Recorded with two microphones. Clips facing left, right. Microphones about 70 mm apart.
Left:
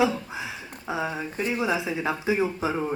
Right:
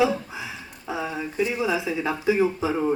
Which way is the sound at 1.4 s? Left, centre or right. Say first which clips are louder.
Right 3 dB; left.